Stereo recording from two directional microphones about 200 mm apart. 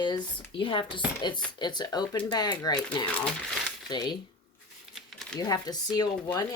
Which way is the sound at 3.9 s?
20° left (ahead or behind).